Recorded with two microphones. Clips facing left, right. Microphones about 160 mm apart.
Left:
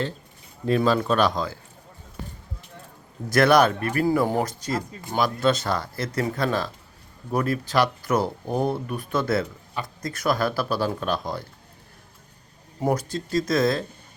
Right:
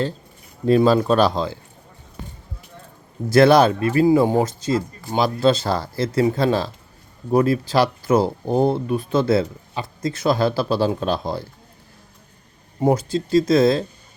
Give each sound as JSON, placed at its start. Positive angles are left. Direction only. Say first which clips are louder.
{"t": 0.7, "sound": "speech", "louder": "right 6 dB", "side_deg": -30}
{"t": 3.2, "sound": "speech", "louder": "right 5 dB", "side_deg": -30}
{"t": 12.8, "sound": "speech", "louder": "right 6 dB", "side_deg": -25}